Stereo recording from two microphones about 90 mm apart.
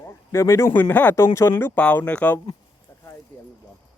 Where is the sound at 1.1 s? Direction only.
30° left (ahead or behind).